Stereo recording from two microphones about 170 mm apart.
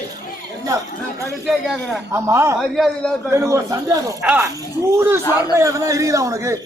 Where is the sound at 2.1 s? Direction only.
15° right (ahead or behind).